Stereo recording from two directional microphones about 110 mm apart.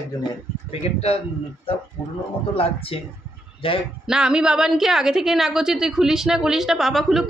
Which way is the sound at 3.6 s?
55° left (ahead or behind).